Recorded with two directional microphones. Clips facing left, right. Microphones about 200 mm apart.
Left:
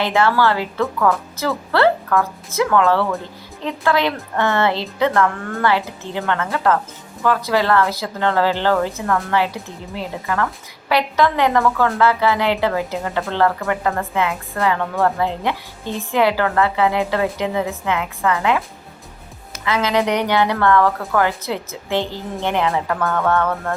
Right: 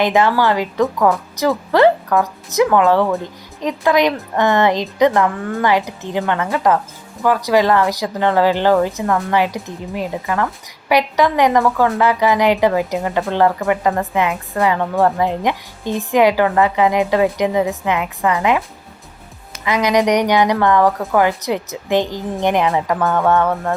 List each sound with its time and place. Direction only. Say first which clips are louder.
0.0 s a woman's voice: right 2 dB; 15° right (ahead or behind)
19.6 s a woman's voice: right 3 dB; 15° right (ahead or behind)